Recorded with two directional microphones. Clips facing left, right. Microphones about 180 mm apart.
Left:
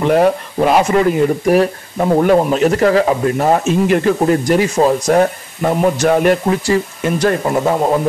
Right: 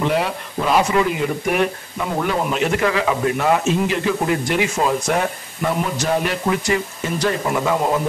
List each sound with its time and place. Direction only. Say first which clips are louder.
0.1 s speech: left 9 dB; 45° left (ahead or behind)
3.8 s speech: left 7 dB; 50° left (ahead or behind)
6.5 s speech: left 5 dB; 35° left (ahead or behind)
7.0 s speech: left 6 dB; 50° left (ahead or behind)